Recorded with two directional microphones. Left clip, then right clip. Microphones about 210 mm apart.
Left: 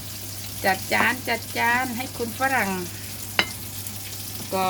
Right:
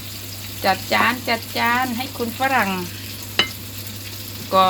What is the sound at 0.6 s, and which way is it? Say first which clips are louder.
Speech: right 4 dB; 20° left (ahead or behind).